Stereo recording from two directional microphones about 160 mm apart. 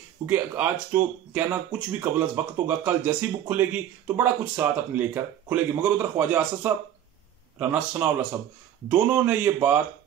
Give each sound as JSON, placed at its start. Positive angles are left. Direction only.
{"t": 0.3, "sound": "speech", "side_deg": -10}